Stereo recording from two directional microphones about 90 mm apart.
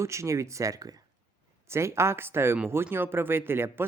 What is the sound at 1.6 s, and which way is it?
Speech, 30° right (ahead or behind).